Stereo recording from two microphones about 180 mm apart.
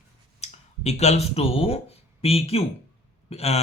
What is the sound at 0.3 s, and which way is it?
Speech, 35° left (ahead or behind).